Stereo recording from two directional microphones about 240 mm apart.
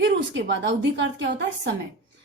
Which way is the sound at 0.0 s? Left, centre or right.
Right.